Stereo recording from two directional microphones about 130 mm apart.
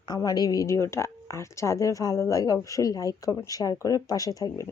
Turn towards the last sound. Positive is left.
turn(degrees=25)  # may be behind; listen again after turning